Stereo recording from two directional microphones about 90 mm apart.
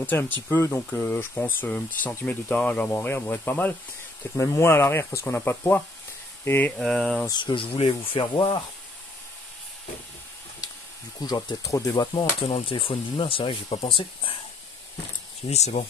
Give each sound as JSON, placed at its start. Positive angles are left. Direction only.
{"t": 0.0, "sound": "speech", "side_deg": 25}
{"t": 6.8, "sound": "speech", "side_deg": 5}
{"t": 7.2, "sound": "speech", "side_deg": 60}
{"t": 10.6, "sound": "a sound", "side_deg": 45}
{"t": 11.1, "sound": "speech", "side_deg": 50}
{"t": 11.6, "sound": "speech", "side_deg": 40}
{"t": 12.4, "sound": "speech", "side_deg": 90}
{"t": 13.8, "sound": "speech", "side_deg": 85}